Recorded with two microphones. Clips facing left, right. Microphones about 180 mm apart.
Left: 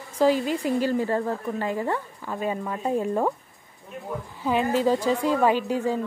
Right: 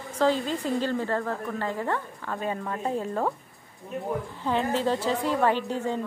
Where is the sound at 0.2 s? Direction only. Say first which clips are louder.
Left 3 dB; 10° left (ahead or behind).